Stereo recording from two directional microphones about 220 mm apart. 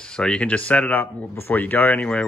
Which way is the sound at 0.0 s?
5° left (ahead or behind).